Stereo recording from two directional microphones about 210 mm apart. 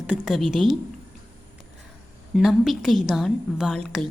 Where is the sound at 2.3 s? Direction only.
Centre (ahead or behind).